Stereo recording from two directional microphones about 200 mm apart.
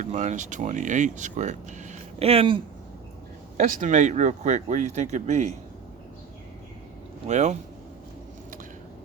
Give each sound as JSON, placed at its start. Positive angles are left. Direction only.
{"t": 0.0, "sound": "speech", "side_deg": -35}
{"t": 3.6, "sound": "speech", "side_deg": -35}
{"t": 7.3, "sound": "speech", "side_deg": -35}